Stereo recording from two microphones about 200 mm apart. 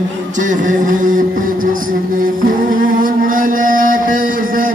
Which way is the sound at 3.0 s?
45° right (ahead or behind).